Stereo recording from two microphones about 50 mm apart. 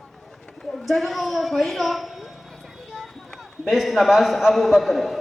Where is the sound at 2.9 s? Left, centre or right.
Centre.